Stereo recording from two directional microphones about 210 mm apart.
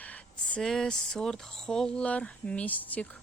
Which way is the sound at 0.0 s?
5° left (ahead or behind).